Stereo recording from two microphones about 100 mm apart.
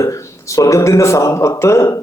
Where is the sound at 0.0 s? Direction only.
30° left (ahead or behind).